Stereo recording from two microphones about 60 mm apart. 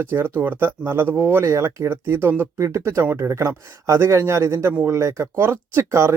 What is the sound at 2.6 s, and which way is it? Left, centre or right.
Speech, right.